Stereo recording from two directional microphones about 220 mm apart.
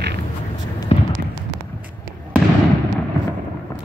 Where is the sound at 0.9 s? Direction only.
30° left (ahead or behind).